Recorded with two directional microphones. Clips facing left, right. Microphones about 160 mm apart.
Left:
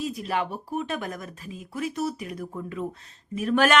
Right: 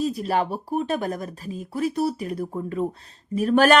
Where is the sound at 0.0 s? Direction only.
40° right (ahead or behind).